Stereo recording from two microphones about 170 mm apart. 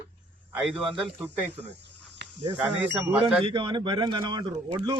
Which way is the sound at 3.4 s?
30° right (ahead or behind).